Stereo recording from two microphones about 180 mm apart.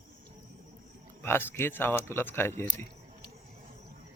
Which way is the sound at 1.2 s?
15° left (ahead or behind).